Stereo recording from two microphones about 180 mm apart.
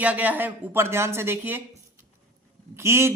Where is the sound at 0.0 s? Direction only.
10° right (ahead or behind).